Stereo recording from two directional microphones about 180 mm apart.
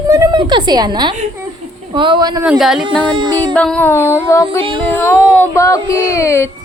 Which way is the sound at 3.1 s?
25° right (ahead or behind).